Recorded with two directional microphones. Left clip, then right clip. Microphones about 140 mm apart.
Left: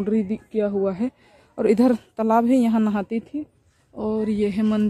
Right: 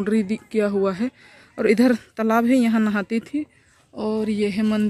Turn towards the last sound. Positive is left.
turn(degrees=5)  # may be behind; listen again after turning